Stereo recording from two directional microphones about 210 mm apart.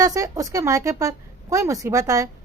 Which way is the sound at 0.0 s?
15° right (ahead or behind).